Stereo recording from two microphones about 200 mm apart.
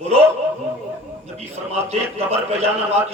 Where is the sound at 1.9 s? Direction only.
30° right (ahead or behind).